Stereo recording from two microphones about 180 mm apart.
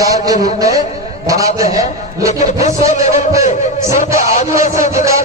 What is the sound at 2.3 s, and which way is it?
Music, 40° left (ahead or behind).